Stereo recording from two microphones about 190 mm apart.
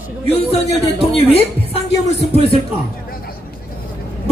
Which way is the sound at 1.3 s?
30° left (ahead or behind).